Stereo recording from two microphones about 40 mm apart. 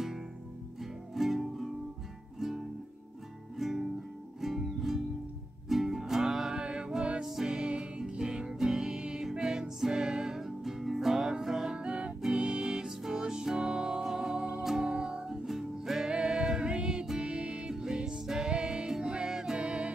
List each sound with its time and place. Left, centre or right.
0.7 s music: centre; by 14.5 s right
14.6 s music: centre
14.9 s music: right
15.4 s music: centre
16.1 s music: right
19.6 s music: right